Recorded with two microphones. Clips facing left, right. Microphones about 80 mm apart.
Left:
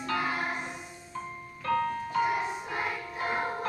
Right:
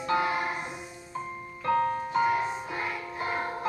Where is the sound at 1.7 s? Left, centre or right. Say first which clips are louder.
Right 3 dB; right.